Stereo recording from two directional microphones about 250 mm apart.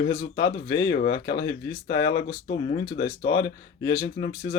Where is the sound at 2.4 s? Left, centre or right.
Left.